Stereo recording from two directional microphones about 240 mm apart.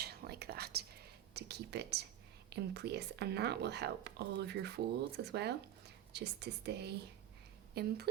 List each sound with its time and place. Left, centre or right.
0.0 s whispering: right
1.3 s a woman's voice: right